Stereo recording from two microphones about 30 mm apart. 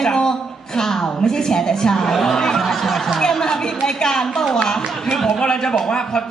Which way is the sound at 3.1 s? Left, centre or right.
Centre.